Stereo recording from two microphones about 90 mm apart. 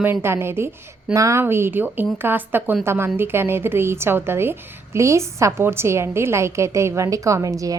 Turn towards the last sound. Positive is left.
turn(degrees=-40)  # may be behind; listen again after turning